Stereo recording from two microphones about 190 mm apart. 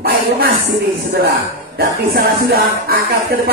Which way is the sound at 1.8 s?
55° right (ahead or behind).